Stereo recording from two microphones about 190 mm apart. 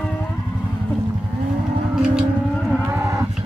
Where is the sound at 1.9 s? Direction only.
5° right (ahead or behind).